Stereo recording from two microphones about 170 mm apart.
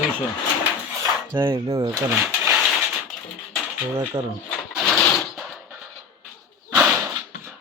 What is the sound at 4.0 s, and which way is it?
Speech, 15° right (ahead or behind).